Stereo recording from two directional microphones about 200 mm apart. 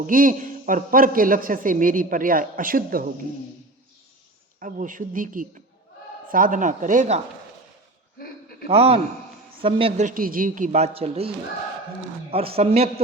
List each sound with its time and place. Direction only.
0.1 s a man's voice: 45° right (ahead or behind)
4.6 s a man's voice: 40° right (ahead or behind)
8.2 s a sound: 45° left (ahead or behind)
8.6 s a man's voice: 30° right (ahead or behind)
12.3 s speech: 30° right (ahead or behind)